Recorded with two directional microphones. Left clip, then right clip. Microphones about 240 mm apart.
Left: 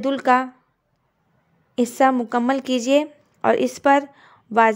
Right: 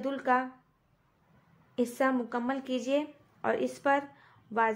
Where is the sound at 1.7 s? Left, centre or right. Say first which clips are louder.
Left 11 dB; left.